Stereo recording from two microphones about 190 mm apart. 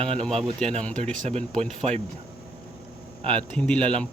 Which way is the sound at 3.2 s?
5° left (ahead or behind).